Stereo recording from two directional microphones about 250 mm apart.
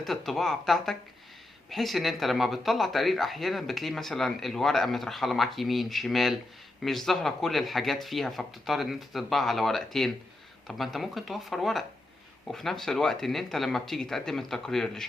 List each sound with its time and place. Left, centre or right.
0.0 s speech: centre